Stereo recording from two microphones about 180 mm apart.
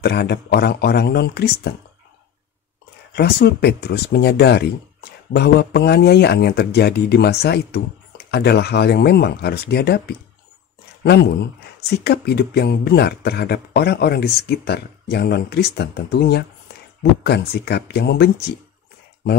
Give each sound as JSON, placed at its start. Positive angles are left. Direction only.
{"t": 0.0, "sound": "speech", "side_deg": 65}
{"t": 3.2, "sound": "speech", "side_deg": 65}
{"t": 12.0, "sound": "speech", "side_deg": 65}